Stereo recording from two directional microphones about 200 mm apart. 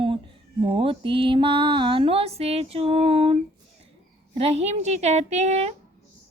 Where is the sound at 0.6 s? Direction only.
25° right (ahead or behind).